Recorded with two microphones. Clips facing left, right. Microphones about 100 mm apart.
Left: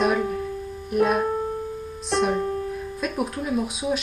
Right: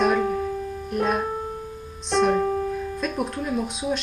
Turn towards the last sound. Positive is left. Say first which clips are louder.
# left 1 dB
turn(degrees=0)  # may be behind; listen again after turning